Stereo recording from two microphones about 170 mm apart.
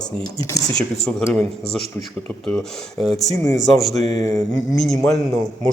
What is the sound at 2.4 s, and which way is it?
Speech, 5° left (ahead or behind).